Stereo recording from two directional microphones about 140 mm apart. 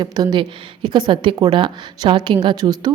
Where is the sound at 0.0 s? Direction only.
30° right (ahead or behind).